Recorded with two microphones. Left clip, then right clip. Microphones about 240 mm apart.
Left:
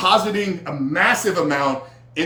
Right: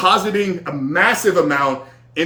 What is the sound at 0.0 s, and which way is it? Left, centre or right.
Speech, centre.